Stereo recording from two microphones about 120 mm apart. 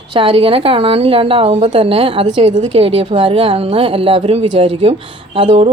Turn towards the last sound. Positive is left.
turn(degrees=-50)  # may be behind; listen again after turning